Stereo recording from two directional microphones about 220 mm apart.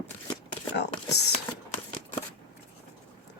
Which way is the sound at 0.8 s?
50° left (ahead or behind).